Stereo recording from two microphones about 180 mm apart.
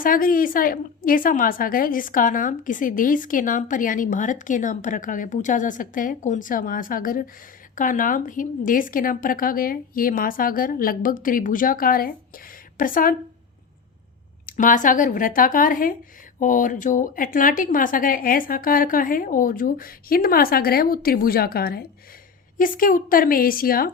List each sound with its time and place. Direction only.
0.0 s a woman's voice: 50° left (ahead or behind)
14.4 s a woman's voice: 50° left (ahead or behind)